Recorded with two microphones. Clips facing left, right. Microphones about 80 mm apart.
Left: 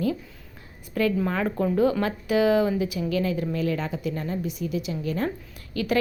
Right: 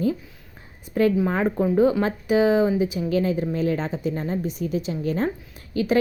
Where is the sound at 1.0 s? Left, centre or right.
Right.